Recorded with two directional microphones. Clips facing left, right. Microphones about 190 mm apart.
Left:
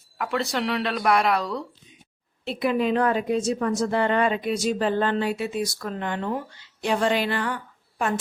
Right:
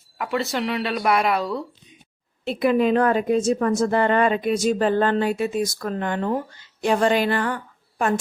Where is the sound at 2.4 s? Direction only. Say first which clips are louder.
Right 4 dB; 50° right (ahead or behind).